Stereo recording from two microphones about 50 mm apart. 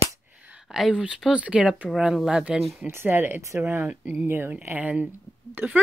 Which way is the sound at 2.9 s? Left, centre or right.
Right.